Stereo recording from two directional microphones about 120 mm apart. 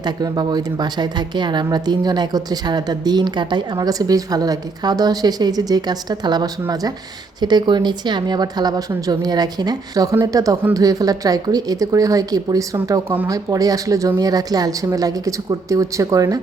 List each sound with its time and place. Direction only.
0.0 s a woman's voice: 35° right (ahead or behind)